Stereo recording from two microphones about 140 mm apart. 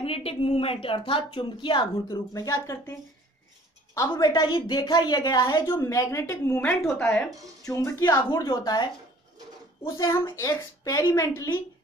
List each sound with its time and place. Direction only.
0.0 s a woman's voice: 45° left (ahead or behind); by 8.8 s 30° left (ahead or behind)
9.8 s a woman's voice: 25° left (ahead or behind)